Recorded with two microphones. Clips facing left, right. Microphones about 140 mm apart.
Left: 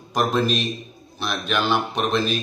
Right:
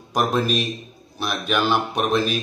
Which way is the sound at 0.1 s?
5° right (ahead or behind).